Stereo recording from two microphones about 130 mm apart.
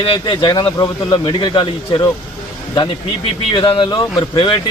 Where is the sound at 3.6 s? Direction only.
40° left (ahead or behind).